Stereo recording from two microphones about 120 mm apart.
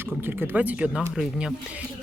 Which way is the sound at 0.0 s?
20° right (ahead or behind).